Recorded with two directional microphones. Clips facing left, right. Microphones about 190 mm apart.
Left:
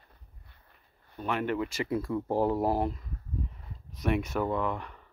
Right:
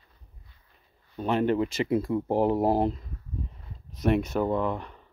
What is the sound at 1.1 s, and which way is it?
Speech, 30° right (ahead or behind).